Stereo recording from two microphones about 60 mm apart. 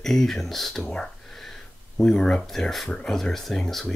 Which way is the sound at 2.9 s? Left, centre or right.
Centre.